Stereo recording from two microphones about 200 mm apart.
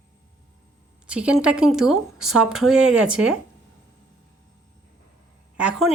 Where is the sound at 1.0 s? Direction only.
5° right (ahead or behind).